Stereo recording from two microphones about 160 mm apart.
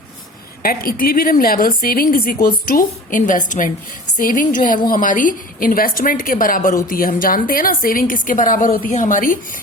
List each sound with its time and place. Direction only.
0.6 s a woman's voice: 65° left (ahead or behind)